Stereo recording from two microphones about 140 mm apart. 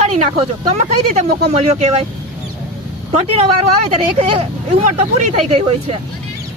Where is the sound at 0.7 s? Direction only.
50° right (ahead or behind).